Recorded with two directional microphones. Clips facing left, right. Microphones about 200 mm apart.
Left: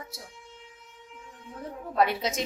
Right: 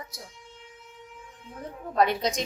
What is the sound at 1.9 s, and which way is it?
Speech, 5° left (ahead or behind).